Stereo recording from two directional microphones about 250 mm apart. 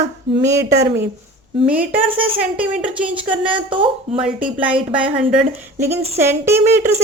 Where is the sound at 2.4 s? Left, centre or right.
Centre.